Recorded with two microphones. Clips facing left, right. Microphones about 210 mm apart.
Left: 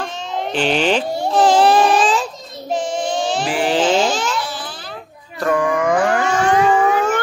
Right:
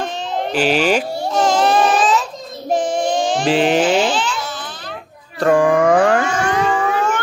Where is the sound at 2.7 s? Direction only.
55° right (ahead or behind).